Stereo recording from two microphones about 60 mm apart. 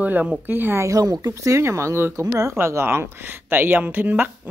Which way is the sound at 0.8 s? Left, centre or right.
Right.